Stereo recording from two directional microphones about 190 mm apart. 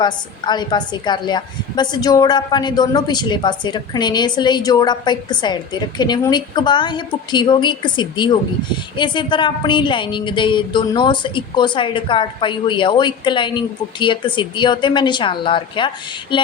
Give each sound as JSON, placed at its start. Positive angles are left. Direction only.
{"t": 0.0, "sound": "a woman's voice", "side_deg": 20}